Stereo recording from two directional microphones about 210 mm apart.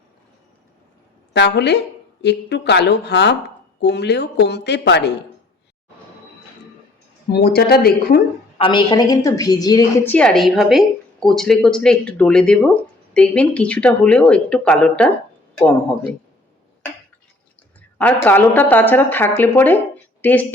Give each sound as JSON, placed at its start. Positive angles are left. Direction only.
{"t": 1.3, "sound": "a woman's voice", "side_deg": 55}
{"t": 7.3, "sound": "a woman's voice", "side_deg": 50}
{"t": 8.5, "sound": "a woman's voice", "side_deg": 25}
{"t": 17.7, "sound": "speech", "side_deg": 5}